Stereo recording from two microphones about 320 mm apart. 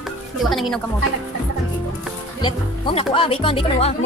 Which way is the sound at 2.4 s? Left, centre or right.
Centre.